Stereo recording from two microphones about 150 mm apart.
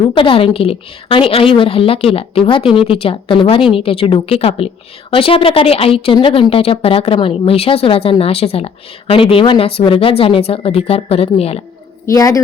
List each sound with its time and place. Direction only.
0.1 s speech: 35° left (ahead or behind)
12.0 s a woman's voice: 20° left (ahead or behind)